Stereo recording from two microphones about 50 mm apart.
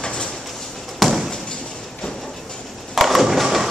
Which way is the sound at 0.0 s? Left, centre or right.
Centre.